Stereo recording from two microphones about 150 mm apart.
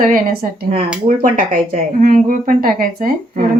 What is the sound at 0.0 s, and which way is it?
Speech, 75° right (ahead or behind).